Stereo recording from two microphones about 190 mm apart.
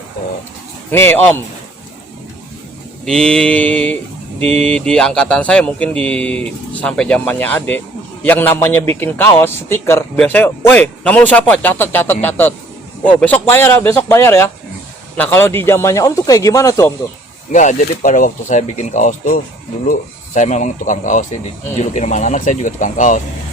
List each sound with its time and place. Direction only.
0.9 s a man's voice: 10° left (ahead or behind)
3.1 s a man's voice: 5° left (ahead or behind)
17.5 s speech: 40° left (ahead or behind)